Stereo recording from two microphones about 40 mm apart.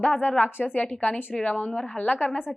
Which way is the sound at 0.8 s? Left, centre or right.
Left.